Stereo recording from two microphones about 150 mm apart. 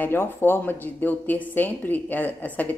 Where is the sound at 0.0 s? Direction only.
15° left (ahead or behind).